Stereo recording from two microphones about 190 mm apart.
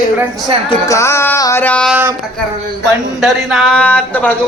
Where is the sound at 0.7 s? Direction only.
15° left (ahead or behind).